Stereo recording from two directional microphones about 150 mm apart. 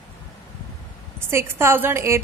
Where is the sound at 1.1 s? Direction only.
15° right (ahead or behind).